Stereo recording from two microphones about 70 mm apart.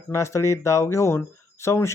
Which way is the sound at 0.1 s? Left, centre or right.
Left.